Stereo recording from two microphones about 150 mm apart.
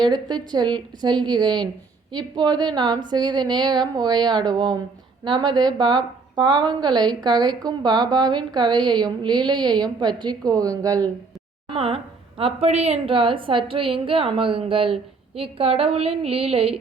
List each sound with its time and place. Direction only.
0.0 s a woman's voice: 30° right (ahead or behind)
11.7 s a woman's voice: 40° right (ahead or behind)